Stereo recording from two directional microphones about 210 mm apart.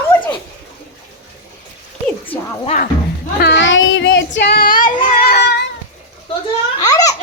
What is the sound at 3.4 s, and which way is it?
Child singing, 55° left (ahead or behind).